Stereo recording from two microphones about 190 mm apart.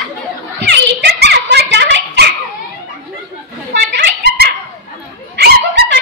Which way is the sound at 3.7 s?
55° right (ahead or behind).